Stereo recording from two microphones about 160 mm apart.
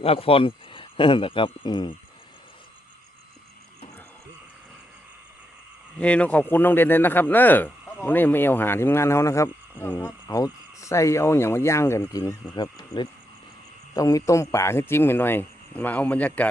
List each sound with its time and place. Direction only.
0.0 s speech: 35° left (ahead or behind)
6.0 s a man's voice: 10° left (ahead or behind)